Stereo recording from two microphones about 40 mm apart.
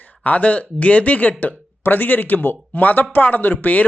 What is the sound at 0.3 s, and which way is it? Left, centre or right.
Speech, left.